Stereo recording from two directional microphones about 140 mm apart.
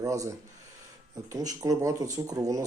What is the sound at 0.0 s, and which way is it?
Speech, 25° right (ahead or behind).